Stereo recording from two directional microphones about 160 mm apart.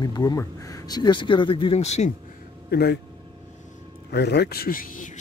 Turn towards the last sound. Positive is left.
turn(degrees=55)  # may be behind; listen again after turning